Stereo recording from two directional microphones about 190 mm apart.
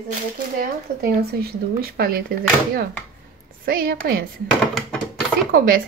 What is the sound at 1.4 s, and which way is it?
Speech, 50° right (ahead or behind).